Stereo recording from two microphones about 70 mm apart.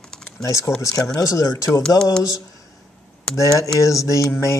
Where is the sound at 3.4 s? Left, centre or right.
Left.